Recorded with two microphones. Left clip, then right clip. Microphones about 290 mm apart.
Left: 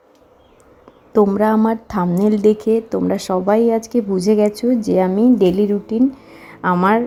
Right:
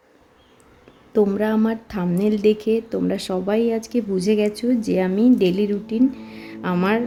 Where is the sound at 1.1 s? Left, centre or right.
Centre.